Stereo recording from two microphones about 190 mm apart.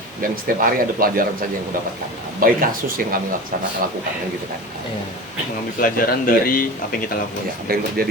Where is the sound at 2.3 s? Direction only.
50° right (ahead or behind).